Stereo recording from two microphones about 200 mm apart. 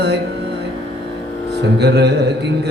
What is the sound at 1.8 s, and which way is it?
Speech, 55° right (ahead or behind).